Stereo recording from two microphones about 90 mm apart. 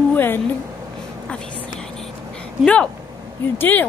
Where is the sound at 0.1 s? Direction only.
20° left (ahead or behind).